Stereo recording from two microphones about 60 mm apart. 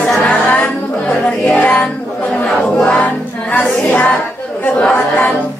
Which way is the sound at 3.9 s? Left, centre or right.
Left.